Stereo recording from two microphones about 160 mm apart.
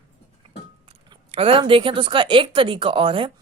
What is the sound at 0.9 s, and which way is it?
Speech, 35° right (ahead or behind).